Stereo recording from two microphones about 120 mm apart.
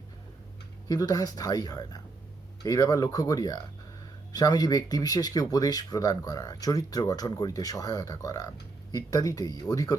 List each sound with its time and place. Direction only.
0.9 s speech: 30° left (ahead or behind)